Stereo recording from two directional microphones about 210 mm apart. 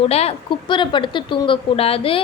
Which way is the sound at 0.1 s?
30° left (ahead or behind).